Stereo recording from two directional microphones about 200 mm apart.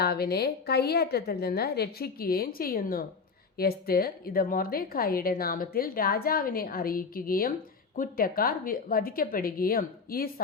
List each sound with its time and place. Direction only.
0.0 s speech: 50° left (ahead or behind)